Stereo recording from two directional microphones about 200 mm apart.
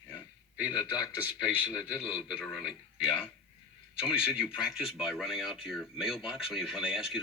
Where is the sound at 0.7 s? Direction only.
20° left (ahead or behind).